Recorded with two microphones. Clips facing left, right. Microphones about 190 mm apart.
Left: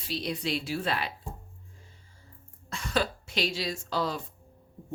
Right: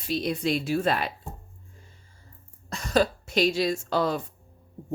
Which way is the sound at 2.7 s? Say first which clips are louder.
Right 6 dB; 40° right (ahead or behind).